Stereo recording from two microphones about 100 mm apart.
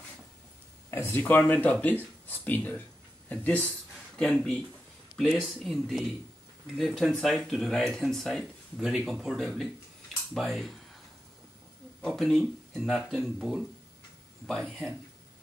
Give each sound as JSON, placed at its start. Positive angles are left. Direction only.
{"t": 0.8, "sound": "speech", "side_deg": 25}
{"t": 5.3, "sound": "speech", "side_deg": 0}
{"t": 12.0, "sound": "speech", "side_deg": 5}